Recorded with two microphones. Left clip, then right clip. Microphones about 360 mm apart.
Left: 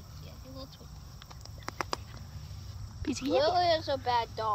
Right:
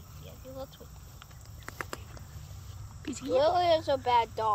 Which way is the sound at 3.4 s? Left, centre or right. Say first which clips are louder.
Right 2 dB; right.